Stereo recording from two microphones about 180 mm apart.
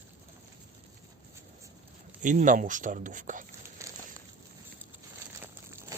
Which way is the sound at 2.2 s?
45° right (ahead or behind).